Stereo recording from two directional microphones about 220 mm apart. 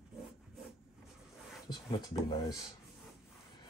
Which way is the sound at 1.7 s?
20° left (ahead or behind).